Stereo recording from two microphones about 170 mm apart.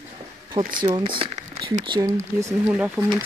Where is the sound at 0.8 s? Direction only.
30° right (ahead or behind).